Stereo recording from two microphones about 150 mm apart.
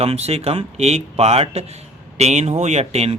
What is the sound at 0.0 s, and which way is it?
A man's voice, 45° right (ahead or behind).